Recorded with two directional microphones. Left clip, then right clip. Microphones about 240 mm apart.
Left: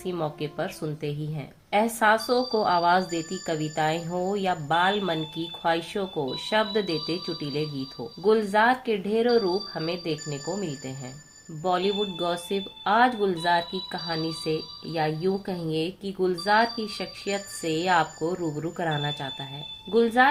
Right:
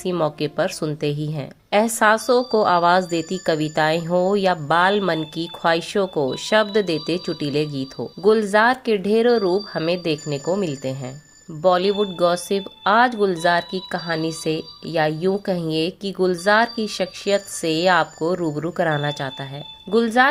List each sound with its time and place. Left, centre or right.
0.0 s speech: right